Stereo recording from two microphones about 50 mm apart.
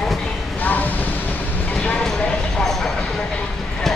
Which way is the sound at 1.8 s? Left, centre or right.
Left.